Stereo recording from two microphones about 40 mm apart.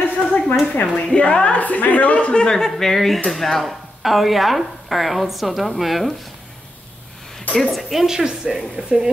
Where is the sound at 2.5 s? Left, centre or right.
Centre.